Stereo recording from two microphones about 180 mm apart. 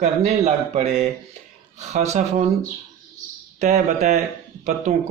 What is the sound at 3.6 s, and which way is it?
Speech, 40° right (ahead or behind).